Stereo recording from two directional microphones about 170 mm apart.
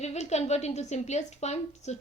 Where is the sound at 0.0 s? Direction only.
40° left (ahead or behind).